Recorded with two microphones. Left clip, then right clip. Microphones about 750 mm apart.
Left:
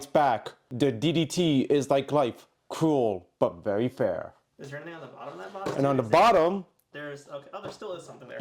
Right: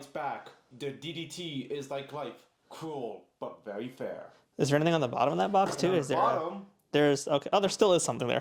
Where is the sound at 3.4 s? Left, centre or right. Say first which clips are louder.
Left 12 dB; left.